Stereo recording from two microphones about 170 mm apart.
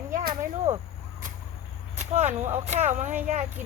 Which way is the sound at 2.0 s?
40° right (ahead or behind).